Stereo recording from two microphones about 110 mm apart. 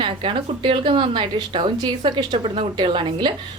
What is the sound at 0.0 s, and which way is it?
A woman's voice, 55° right (ahead or behind).